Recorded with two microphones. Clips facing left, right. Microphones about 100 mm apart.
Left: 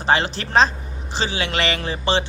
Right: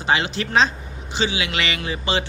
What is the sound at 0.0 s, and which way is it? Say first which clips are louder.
Speech: left 2 dB; 40° left (ahead or behind).